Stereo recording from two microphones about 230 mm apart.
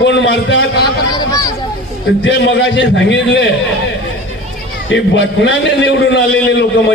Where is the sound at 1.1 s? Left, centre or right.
Centre.